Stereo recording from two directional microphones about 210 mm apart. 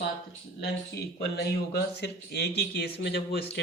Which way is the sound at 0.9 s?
50° left (ahead or behind).